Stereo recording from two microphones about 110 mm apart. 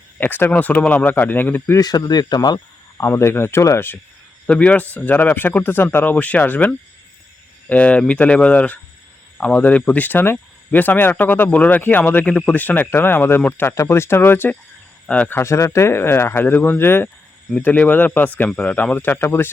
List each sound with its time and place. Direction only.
0.2 s speech: 15° left (ahead or behind)
1.8 s speech: 40° left (ahead or behind)
3.0 s speech: 25° left (ahead or behind)
4.4 s speech: 10° left (ahead or behind)
15.0 s speech: 10° left (ahead or behind)
15.4 s speech: 25° left (ahead or behind)